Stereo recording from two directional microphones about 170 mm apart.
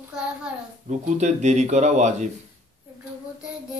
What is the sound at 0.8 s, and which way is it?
Speech, 45° right (ahead or behind).